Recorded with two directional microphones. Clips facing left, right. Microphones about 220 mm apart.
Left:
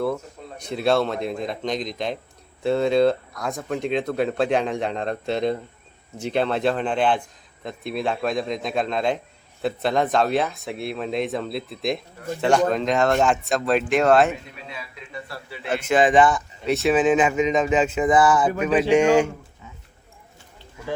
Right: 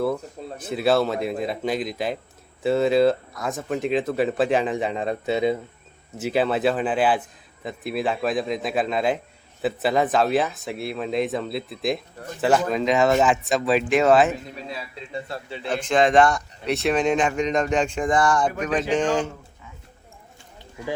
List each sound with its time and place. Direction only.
0.6 s a man's voice: 5° right (ahead or behind)
14.7 s a man's voice: 35° right (ahead or behind)
15.6 s a man's voice: 10° left (ahead or behind)